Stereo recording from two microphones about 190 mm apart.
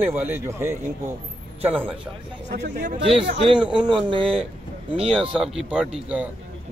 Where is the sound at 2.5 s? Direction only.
45° right (ahead or behind).